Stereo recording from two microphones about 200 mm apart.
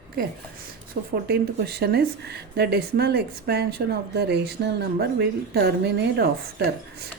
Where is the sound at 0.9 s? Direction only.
45° right (ahead or behind).